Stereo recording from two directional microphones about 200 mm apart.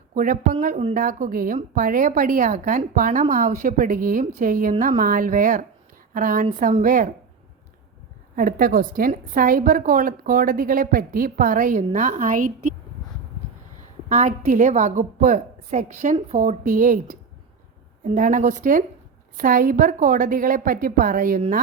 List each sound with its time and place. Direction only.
0.1 s a woman's voice: 45° right (ahead or behind)
8.4 s a woman's voice: 45° right (ahead or behind)
14.1 s a woman's voice: 35° right (ahead or behind)